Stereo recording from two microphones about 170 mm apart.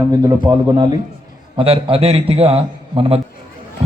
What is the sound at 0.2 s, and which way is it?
Speech, 20° right (ahead or behind).